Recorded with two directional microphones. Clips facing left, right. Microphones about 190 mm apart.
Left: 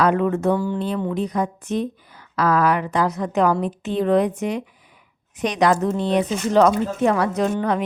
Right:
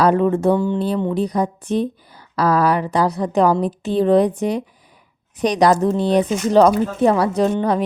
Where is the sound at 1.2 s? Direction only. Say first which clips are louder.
Right 3 dB; 35° right (ahead or behind).